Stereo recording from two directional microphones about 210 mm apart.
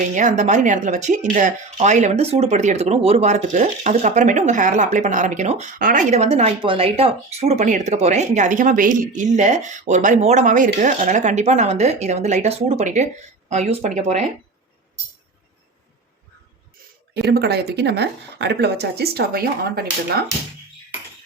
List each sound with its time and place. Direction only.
0.1 s speech: 35° right (ahead or behind)
17.3 s speech: 50° right (ahead or behind)